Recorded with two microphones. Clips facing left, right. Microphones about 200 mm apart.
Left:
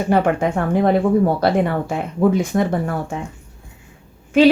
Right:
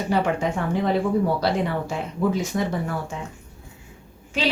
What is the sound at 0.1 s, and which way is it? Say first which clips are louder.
Speech: left 5 dB; 55° left (ahead or behind).